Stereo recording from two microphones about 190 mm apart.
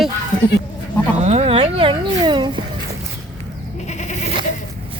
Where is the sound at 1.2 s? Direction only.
35° right (ahead or behind).